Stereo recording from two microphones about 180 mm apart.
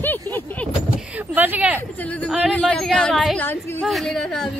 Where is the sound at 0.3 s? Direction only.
10° left (ahead or behind).